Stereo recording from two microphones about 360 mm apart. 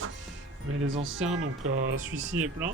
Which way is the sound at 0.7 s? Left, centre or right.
Right.